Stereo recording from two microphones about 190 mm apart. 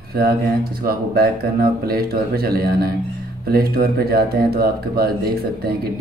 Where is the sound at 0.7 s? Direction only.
50° right (ahead or behind).